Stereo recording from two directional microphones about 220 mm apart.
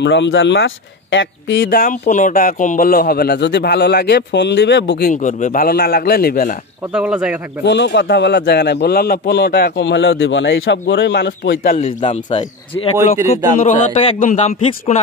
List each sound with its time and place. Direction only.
0.0 s speech: 55° left (ahead or behind)
6.9 s speech: 5° right (ahead or behind)
7.6 s speech: 50° left (ahead or behind)
11.7 s a man's voice: 30° left (ahead or behind)